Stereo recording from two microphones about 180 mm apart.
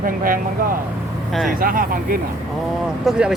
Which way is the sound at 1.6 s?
50° right (ahead or behind).